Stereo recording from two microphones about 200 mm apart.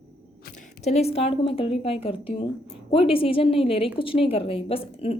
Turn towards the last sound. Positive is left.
turn(degrees=30)  # may be behind; listen again after turning